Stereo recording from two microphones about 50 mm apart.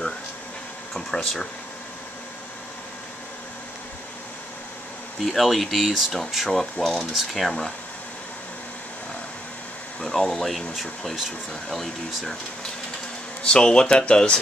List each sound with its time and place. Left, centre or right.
0.9 s speech: centre
5.2 s speech: centre
6.5 s speech: centre
10.0 s speech: centre
13.4 s speech: centre